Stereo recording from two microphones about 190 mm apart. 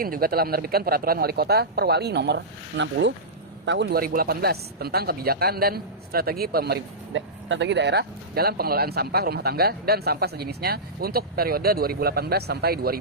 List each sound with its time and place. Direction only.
0.0 s speech: 50° right (ahead or behind)